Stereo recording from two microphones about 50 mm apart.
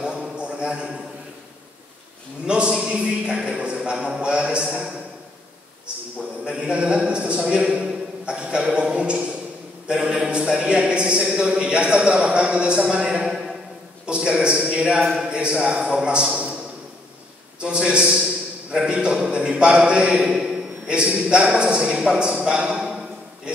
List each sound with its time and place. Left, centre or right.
0.0 s a sound: centre
2.4 s a man's voice: centre
6.4 s a man's voice: centre
17.6 s a man's voice: centre